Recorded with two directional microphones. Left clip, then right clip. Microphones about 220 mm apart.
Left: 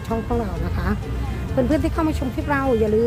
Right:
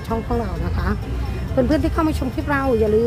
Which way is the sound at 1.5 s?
15° right (ahead or behind).